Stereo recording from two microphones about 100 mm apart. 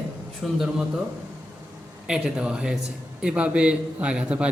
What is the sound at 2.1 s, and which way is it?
A man's voice, 10° right (ahead or behind).